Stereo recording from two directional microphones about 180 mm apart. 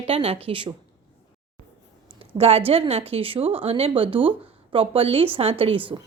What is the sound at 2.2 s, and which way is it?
A woman's voice, 30° right (ahead or behind).